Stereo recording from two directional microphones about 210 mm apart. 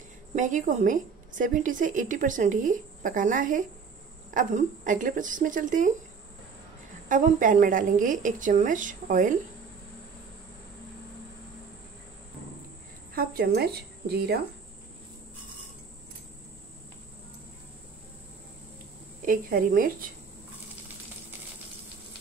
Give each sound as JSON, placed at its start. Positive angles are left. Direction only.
{"t": 0.4, "sound": "a woman's voice", "side_deg": -35}
{"t": 7.1, "sound": "a woman's voice", "side_deg": -40}
{"t": 13.1, "sound": "a woman's voice", "side_deg": -45}
{"t": 19.2, "sound": "a woman's voice", "side_deg": -40}